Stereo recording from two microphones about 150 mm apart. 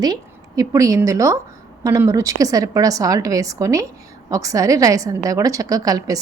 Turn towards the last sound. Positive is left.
turn(degrees=-25)  # may be behind; listen again after turning